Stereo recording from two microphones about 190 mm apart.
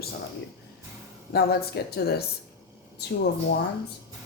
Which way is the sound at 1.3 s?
55° left (ahead or behind).